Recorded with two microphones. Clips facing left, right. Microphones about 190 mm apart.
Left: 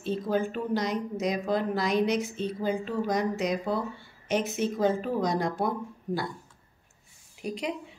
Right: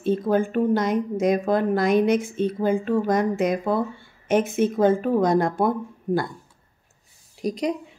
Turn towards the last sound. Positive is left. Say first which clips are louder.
# right 7 dB
turn(degrees=-40)  # may be behind; listen again after turning